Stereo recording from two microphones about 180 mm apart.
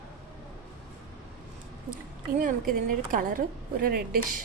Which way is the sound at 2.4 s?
50° right (ahead or behind).